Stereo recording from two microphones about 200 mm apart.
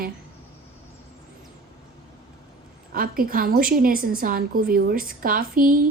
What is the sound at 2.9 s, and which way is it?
A woman's voice, 45° right (ahead or behind).